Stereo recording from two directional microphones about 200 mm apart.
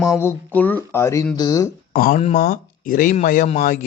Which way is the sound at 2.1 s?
35° left (ahead or behind).